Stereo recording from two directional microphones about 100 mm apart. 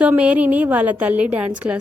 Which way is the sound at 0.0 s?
15° right (ahead or behind).